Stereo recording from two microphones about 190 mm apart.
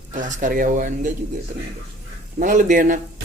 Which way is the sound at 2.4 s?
45° right (ahead or behind).